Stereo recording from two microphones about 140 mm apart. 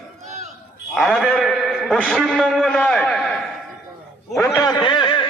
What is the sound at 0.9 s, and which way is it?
A man's voice, centre (ahead or behind).